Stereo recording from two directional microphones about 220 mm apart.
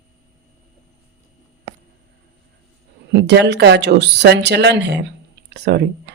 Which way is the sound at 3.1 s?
50° right (ahead or behind).